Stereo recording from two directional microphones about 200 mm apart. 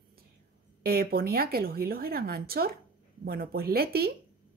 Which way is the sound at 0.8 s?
50° right (ahead or behind).